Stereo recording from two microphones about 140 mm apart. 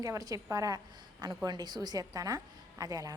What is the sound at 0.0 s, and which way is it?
A woman's voice, 25° right (ahead or behind).